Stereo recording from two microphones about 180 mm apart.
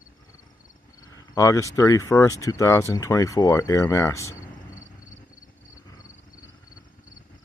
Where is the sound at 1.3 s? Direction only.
20° left (ahead or behind).